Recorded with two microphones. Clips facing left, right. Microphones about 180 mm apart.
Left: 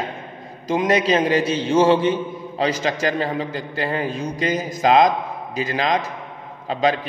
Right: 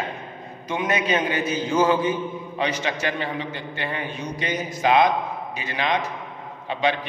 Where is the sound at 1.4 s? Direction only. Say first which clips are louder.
Left 3 dB; 80° left.